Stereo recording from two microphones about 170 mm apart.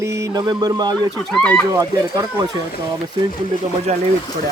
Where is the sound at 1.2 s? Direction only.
5° left (ahead or behind).